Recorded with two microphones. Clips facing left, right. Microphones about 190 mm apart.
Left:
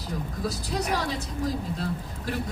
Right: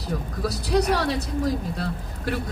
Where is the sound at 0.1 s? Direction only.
65° right (ahead or behind).